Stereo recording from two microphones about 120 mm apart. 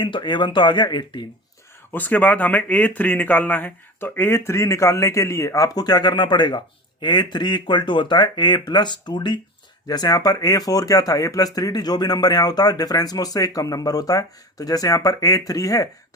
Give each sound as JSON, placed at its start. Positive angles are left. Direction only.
{"t": 0.0, "sound": "speech", "side_deg": 40}
{"t": 1.9, "sound": "speech", "side_deg": 15}